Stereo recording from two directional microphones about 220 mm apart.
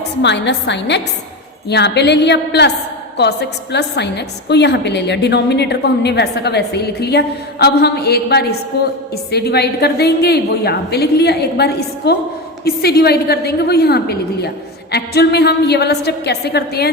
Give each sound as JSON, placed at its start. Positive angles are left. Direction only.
{"t": 0.2, "sound": "a woman's voice", "side_deg": 55}